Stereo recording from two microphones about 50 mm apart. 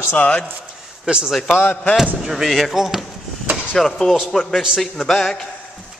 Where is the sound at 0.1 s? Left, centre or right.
Left.